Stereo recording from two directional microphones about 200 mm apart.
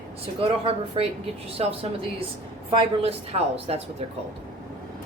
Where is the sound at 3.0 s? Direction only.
30° right (ahead or behind).